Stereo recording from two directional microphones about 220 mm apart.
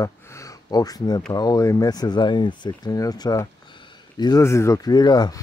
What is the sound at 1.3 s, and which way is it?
Speech, 15° left (ahead or behind).